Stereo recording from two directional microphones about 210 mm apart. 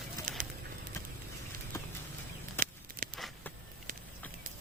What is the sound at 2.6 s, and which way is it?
Walk, 10° left (ahead or behind).